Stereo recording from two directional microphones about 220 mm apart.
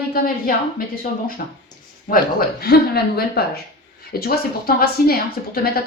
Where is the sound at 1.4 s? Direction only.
40° left (ahead or behind).